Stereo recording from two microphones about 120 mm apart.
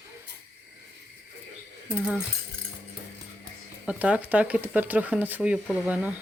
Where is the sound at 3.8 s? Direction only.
10° right (ahead or behind).